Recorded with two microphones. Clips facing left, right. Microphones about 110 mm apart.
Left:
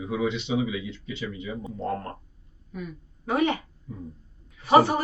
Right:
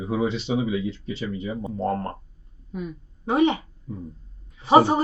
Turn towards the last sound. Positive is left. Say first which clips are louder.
# right 2 dB
turn(degrees=-25)  # may be behind; listen again after turning